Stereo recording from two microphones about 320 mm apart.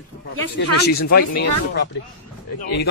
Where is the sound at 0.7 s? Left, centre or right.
Left.